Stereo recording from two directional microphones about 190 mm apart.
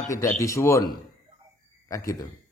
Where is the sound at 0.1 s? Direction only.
15° left (ahead or behind).